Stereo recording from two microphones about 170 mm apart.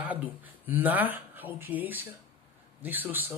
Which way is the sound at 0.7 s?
10° right (ahead or behind).